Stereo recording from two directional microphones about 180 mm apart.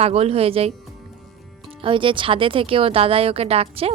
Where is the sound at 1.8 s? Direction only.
30° right (ahead or behind).